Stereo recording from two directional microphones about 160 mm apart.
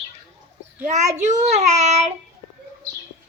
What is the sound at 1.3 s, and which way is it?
Speech, 45° right (ahead or behind).